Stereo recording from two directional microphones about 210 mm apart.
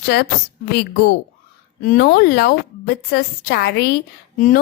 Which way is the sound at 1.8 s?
40° left (ahead or behind).